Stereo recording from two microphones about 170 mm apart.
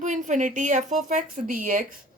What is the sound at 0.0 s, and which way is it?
Speech, 45° right (ahead or behind).